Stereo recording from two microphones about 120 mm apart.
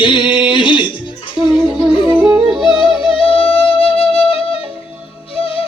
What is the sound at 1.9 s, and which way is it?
Music, 40° left (ahead or behind).